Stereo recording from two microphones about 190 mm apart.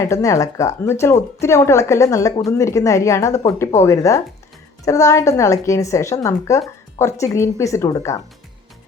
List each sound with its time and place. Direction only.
0.0 s a woman's voice: 15° left (ahead or behind)